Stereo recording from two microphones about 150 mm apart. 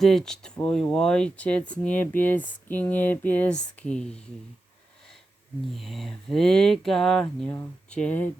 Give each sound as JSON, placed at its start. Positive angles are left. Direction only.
{"t": 0.0, "sound": "speech", "side_deg": 0}
{"t": 5.7, "sound": "speech", "side_deg": 0}